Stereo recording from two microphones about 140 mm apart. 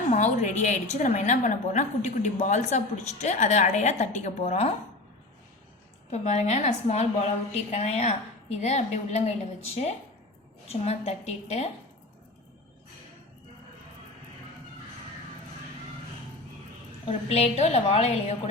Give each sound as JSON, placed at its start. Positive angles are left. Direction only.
{"t": 0.1, "sound": "a woman's voice", "side_deg": 60}
{"t": 6.1, "sound": "a woman's voice", "side_deg": 50}
{"t": 17.1, "sound": "a woman's voice", "side_deg": 50}